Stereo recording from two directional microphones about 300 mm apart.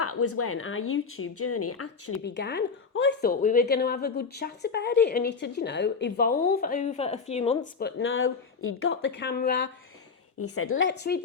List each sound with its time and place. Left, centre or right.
0.0 s speech: left
2.2 s a woman's voice: left
10.4 s a woman's voice: left